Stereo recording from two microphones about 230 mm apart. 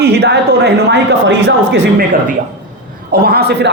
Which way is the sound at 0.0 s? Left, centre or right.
Right.